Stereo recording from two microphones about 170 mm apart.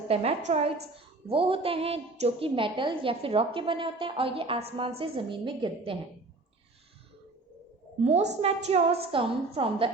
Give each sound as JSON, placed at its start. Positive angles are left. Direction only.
{"t": 0.1, "sound": "a woman's voice", "side_deg": -35}
{"t": 8.0, "sound": "a woman's voice", "side_deg": -40}